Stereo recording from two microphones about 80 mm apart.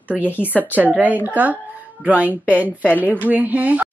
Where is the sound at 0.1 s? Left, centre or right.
Centre.